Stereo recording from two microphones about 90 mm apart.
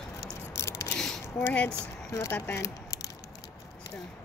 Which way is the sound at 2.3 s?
25° left (ahead or behind).